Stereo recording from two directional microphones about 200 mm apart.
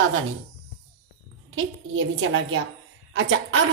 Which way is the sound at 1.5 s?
70° right (ahead or behind).